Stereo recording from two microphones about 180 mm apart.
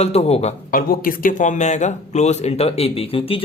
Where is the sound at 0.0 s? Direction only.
35° left (ahead or behind).